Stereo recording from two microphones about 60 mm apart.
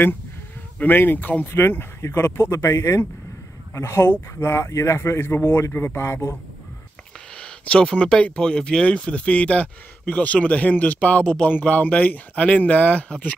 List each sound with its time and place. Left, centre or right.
0.7 s speech: left
2.5 s speech: left
5.7 s speech: left
7.3 s speech: centre